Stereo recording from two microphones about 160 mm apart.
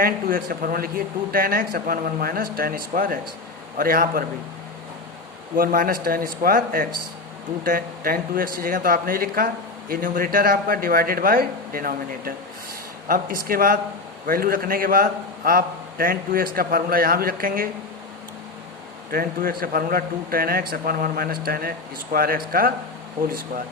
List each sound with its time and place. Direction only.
0.0 s a man's voice: 65° right (ahead or behind)
5.5 s a man's voice: 60° right (ahead or behind)
19.1 s a man's voice: 65° right (ahead or behind)